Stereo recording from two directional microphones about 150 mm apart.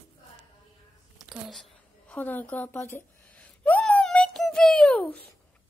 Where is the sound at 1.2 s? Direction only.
Centre (ahead or behind).